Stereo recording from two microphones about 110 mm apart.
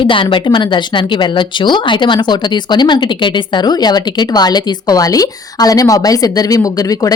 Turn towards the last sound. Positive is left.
turn(degrees=35)  # may be behind; listen again after turning